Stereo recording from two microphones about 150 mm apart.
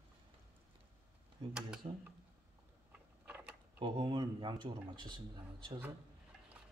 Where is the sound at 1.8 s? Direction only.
40° right (ahead or behind).